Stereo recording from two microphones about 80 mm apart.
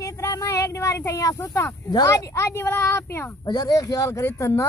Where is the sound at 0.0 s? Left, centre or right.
Left.